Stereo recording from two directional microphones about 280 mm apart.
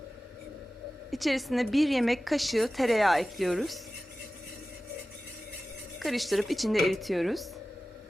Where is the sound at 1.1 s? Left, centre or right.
Centre.